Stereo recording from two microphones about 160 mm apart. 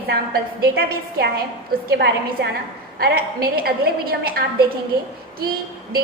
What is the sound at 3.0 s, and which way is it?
A woman's voice, 70° right (ahead or behind).